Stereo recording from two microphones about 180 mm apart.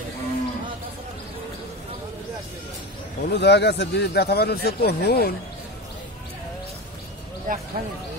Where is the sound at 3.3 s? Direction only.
70° left (ahead or behind).